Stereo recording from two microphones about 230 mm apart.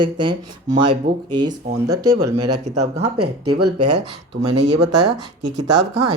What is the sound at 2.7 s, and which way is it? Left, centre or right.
Speech, right.